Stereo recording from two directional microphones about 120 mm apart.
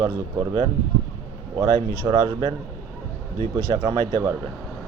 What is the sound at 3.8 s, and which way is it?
Speech, 30° right (ahead or behind).